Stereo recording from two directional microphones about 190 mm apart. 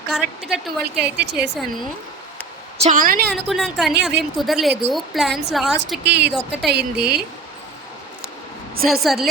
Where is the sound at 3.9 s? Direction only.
65° right (ahead or behind).